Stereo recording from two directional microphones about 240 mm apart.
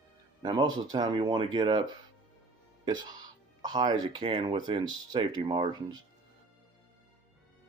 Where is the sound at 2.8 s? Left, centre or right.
Centre.